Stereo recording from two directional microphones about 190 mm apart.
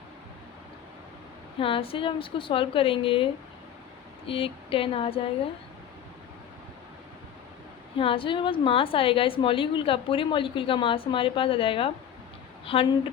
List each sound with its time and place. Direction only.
1.5 s a woman's voice: 30° left (ahead or behind)
4.3 s a woman's voice: 30° left (ahead or behind)
7.9 s a woman's voice: 25° left (ahead or behind)